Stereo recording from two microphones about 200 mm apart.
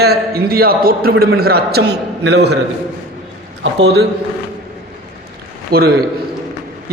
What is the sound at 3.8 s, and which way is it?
Speech, 55° right (ahead or behind).